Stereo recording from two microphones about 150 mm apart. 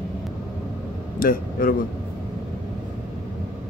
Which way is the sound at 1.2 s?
75° left (ahead or behind).